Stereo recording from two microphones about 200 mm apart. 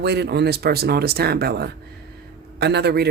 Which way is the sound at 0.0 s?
55° right (ahead or behind).